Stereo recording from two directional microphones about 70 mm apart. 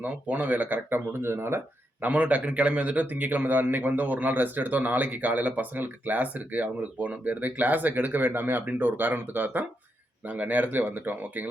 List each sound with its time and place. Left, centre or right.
0.0 s speech: right